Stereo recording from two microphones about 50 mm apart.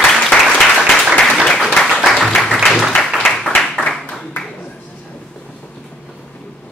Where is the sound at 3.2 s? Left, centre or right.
Centre.